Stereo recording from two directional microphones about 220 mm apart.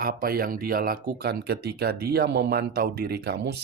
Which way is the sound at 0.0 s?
40° right (ahead or behind).